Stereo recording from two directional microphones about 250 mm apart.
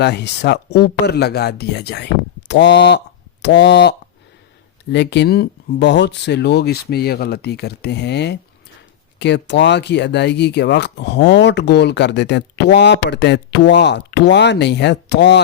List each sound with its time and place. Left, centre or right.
0.0 s speech: left